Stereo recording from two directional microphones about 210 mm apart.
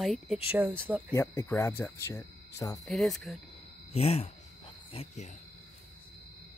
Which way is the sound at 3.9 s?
30° left (ahead or behind).